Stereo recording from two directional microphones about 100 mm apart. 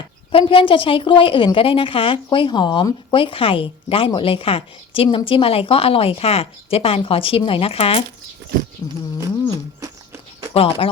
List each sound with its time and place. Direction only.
0.3 s a woman's voice: 65° left (ahead or behind)
10.5 s speech: 75° left (ahead or behind)